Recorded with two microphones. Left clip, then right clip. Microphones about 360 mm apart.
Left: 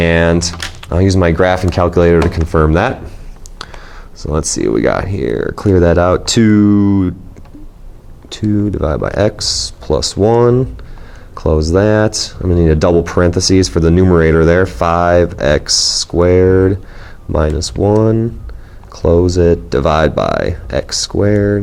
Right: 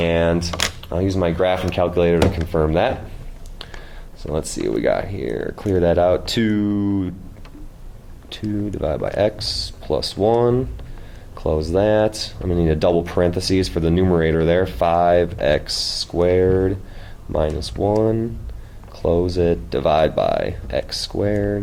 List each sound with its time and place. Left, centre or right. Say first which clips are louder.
0.0 s speech: left 6 dB; left
4.2 s speech: left 7 dB; left
8.3 s speech: left 9 dB; left